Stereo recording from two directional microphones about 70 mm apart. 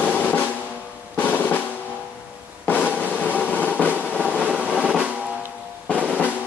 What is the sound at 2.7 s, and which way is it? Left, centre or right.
Drum, left.